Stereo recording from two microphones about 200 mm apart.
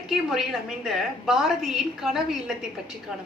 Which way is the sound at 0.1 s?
Centre (ahead or behind).